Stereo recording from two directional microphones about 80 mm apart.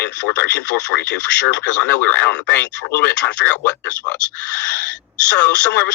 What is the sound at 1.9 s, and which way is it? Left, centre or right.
Speech, centre.